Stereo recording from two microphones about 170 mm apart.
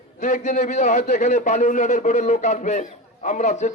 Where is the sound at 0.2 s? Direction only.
45° left (ahead or behind).